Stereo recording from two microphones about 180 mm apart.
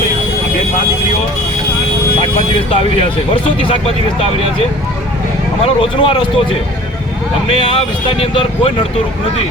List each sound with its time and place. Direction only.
3.6 s speech: 30° left (ahead or behind)
5.6 s speech: 30° left (ahead or behind)